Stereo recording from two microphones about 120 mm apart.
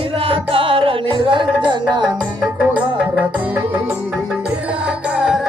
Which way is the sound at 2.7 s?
10° right (ahead or behind).